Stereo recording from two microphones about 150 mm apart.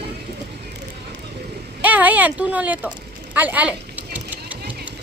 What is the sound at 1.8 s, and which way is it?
Speech, 10° right (ahead or behind).